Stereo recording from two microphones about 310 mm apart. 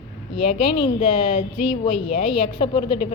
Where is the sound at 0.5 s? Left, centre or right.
Centre.